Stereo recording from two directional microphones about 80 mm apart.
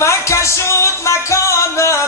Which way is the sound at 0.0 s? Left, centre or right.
Left.